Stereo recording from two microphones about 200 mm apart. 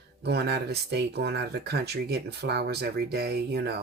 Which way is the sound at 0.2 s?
55° right (ahead or behind).